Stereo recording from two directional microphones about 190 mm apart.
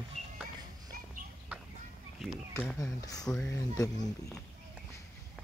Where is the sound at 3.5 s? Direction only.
15° left (ahead or behind).